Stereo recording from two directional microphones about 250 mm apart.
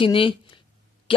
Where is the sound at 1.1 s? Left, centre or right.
Left.